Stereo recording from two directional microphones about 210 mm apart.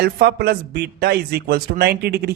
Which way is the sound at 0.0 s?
50° right (ahead or behind).